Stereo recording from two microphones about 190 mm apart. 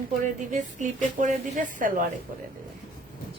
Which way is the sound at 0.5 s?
40° right (ahead or behind).